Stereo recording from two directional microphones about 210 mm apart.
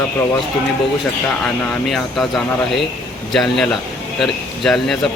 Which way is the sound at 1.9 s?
Centre (ahead or behind).